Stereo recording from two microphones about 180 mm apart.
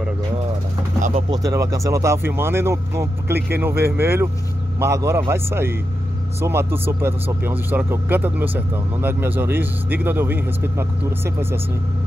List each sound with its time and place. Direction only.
1.3 s speech: 20° right (ahead or behind)